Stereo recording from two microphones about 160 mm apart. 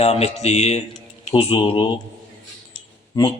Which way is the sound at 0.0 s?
40° left (ahead or behind).